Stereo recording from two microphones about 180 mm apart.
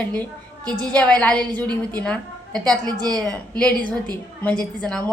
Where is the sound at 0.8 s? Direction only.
5° left (ahead or behind).